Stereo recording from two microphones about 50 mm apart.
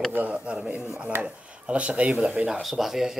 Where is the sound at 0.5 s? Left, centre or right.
Centre.